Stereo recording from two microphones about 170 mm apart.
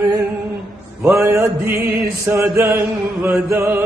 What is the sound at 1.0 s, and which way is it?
Music, 15° right (ahead or behind).